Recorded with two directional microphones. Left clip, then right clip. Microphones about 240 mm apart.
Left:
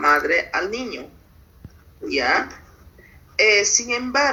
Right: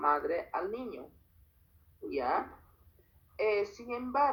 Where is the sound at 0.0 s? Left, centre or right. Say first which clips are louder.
Left 13 dB; centre.